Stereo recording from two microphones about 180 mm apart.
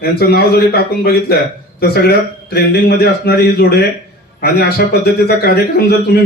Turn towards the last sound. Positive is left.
turn(degrees=65)  # may be behind; listen again after turning